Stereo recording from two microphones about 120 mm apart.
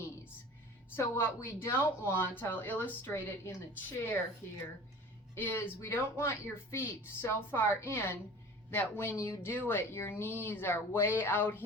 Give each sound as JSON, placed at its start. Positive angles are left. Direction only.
{"t": 0.9, "sound": "speech", "side_deg": 20}
{"t": 5.3, "sound": "speech", "side_deg": 20}